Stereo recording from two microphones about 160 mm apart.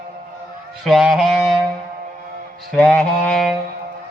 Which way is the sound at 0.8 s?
Centre (ahead or behind).